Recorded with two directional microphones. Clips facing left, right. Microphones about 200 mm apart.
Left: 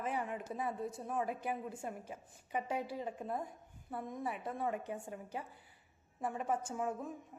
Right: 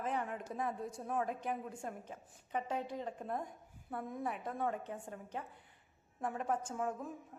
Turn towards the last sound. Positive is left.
turn(degrees=5)  # may be behind; listen again after turning